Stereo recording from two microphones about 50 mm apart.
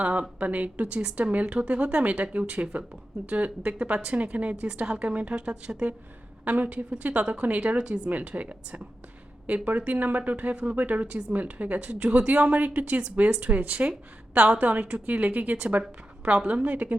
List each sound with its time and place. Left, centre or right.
0.0 s speech: right